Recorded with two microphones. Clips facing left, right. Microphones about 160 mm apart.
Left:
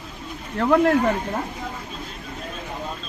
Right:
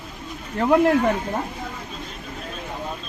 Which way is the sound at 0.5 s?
10° right (ahead or behind).